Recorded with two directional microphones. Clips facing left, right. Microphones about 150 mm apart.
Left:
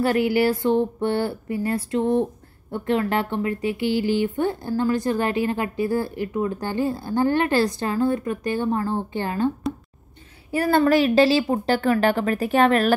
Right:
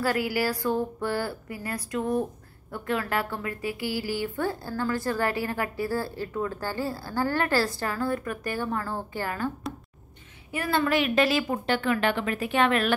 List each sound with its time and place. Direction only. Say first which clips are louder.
0.0 s a woman's voice: left 7 dB; 25° left (ahead or behind)
10.5 s a woman's voice: left 7 dB; 40° left (ahead or behind)